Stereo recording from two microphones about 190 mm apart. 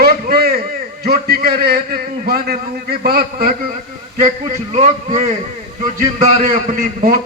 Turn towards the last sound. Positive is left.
turn(degrees=-45)  # may be behind; listen again after turning